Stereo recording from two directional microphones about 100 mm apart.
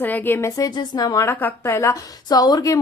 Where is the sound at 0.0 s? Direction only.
15° left (ahead or behind).